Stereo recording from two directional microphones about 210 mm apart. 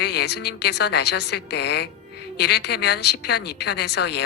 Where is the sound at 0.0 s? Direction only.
50° left (ahead or behind).